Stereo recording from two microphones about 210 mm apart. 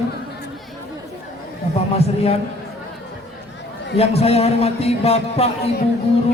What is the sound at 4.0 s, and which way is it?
A man's voice, 30° left (ahead or behind).